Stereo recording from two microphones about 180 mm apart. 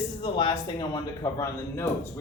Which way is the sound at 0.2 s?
30° left (ahead or behind).